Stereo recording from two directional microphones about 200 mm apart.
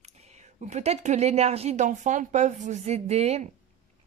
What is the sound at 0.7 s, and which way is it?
Speech, 35° right (ahead or behind).